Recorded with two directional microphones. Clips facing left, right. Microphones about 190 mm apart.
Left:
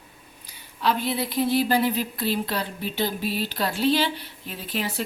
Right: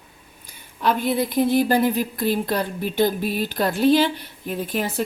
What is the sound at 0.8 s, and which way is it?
A woman's voice, 50° right (ahead or behind).